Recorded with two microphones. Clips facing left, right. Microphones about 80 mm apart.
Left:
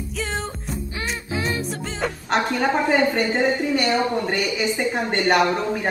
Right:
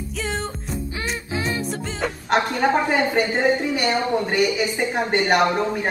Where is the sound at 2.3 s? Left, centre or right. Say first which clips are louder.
Right 2 dB; right.